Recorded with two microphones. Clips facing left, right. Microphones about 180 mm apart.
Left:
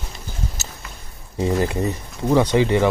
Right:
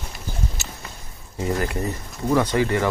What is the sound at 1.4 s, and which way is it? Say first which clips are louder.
Speech: left 4 dB; 25° left (ahead or behind).